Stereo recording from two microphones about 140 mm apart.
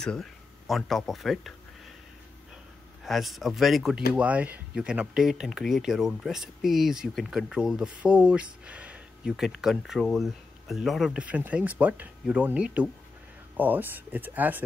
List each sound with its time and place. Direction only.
0.0 s speech: 5° left (ahead or behind)
3.0 s speech: centre (ahead or behind)